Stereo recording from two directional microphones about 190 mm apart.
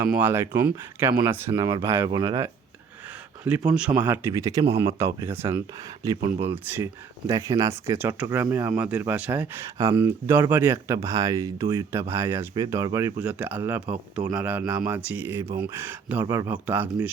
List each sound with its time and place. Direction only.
0.1 s speech: 10° right (ahead or behind)
3.7 s speech: 5° right (ahead or behind)
13.8 s speech: 35° right (ahead or behind)
14.3 s speech: 15° right (ahead or behind)